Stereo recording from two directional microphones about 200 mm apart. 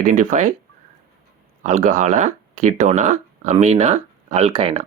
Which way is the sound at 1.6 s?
40° right (ahead or behind).